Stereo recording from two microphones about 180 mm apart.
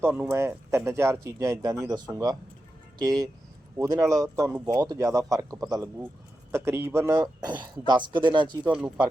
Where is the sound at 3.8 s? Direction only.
15° right (ahead or behind).